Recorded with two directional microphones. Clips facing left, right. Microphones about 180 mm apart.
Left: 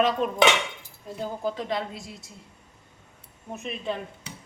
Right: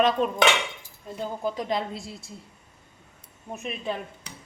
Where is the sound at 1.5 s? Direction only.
25° right (ahead or behind).